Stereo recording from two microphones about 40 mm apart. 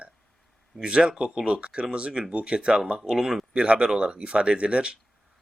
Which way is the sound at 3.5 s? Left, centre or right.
Right.